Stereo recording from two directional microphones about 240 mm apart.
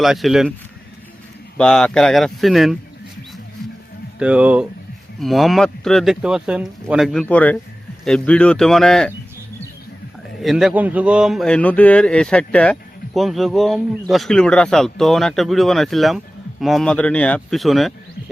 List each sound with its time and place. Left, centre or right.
0.0 s a man's voice: centre
1.5 s a man's voice: centre
4.2 s a man's voice: centre
10.4 s a man's voice: centre